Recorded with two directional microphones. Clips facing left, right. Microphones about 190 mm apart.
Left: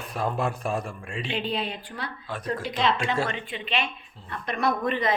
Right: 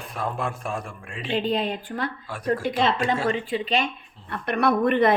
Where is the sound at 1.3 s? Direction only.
45° right (ahead or behind).